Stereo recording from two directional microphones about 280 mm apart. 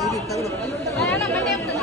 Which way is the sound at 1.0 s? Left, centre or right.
Centre.